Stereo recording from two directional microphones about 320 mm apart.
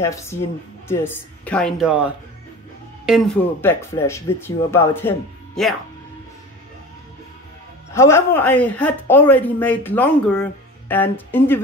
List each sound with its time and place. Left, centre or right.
0.0 s speech: centre
7.9 s speech: centre